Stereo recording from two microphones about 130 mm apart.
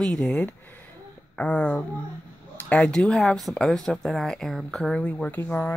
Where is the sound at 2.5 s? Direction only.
10° left (ahead or behind).